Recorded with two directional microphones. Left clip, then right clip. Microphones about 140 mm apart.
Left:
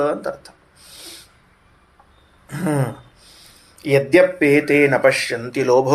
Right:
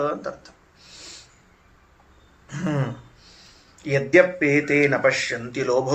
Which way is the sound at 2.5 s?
40° left (ahead or behind).